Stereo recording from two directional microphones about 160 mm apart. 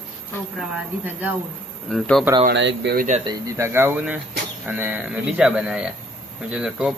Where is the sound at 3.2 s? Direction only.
20° right (ahead or behind).